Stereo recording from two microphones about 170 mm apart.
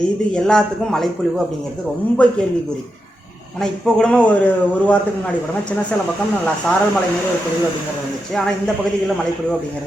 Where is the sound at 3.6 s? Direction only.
Centre (ahead or behind).